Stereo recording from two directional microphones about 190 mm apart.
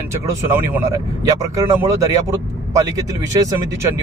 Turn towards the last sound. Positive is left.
turn(degrees=-20)  # may be behind; listen again after turning